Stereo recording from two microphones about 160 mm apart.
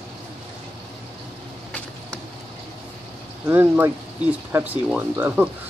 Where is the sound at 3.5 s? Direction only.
15° right (ahead or behind).